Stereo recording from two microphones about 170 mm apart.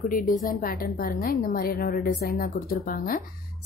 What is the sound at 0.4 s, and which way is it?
A woman's voice, 55° left (ahead or behind).